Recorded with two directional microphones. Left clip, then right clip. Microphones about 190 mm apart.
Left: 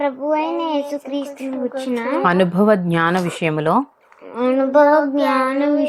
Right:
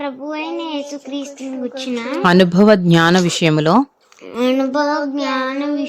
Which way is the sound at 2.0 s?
30° right (ahead or behind).